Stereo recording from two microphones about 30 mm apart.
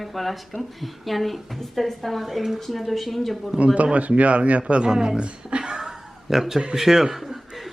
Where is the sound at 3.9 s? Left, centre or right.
Right.